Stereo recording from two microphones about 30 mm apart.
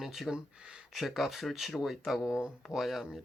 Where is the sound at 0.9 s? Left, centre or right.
Centre.